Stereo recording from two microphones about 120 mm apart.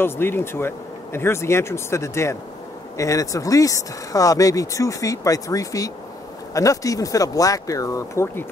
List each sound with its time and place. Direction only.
0.0 s speech: 20° left (ahead or behind)